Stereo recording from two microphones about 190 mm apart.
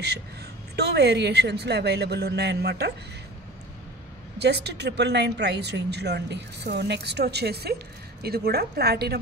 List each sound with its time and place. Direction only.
0.7 s speech: 60° right (ahead or behind)
4.4 s speech: 60° right (ahead or behind)